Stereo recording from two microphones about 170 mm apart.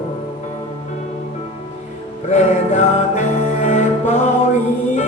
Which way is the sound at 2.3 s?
40° left (ahead or behind).